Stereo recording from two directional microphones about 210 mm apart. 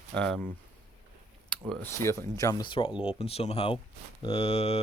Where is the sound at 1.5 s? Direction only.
5° left (ahead or behind).